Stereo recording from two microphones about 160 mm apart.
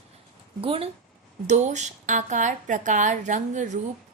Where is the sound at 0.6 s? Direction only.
35° right (ahead or behind).